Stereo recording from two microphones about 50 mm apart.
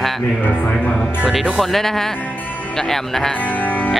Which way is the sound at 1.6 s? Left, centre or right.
Centre.